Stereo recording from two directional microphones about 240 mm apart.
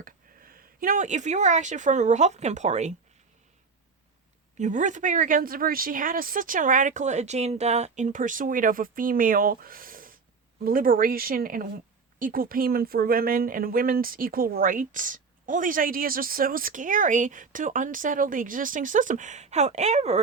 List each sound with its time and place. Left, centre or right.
0.0 s speech: right
4.5 s speech: right